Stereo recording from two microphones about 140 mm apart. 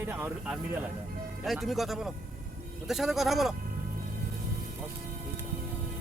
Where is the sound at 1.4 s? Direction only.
Centre (ahead or behind).